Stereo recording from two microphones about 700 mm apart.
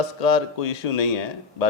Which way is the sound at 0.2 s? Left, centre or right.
Left.